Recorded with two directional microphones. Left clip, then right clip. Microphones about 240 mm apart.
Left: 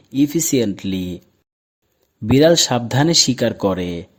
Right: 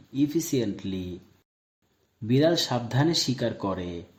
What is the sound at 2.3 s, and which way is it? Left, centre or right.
Speech, left.